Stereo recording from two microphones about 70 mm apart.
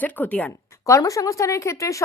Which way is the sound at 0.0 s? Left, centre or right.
Left.